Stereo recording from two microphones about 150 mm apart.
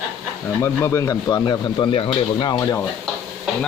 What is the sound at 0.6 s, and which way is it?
Speech, 20° left (ahead or behind).